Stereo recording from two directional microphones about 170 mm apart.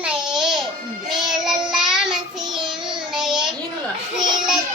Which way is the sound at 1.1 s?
25° right (ahead or behind).